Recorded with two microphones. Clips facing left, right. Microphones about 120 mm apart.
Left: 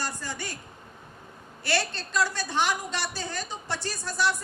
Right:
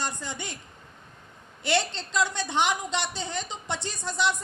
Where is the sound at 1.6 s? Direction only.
20° right (ahead or behind).